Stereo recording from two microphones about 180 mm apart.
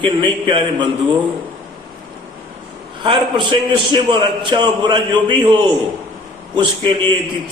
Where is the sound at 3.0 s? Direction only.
25° right (ahead or behind).